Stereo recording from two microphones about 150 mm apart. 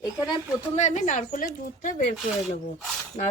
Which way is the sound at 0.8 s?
50° left (ahead or behind).